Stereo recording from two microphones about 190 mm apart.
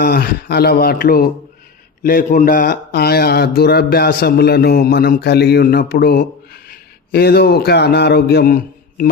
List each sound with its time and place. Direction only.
0.0 s speech: 55° left (ahead or behind)
2.0 s mantra: 50° left (ahead or behind)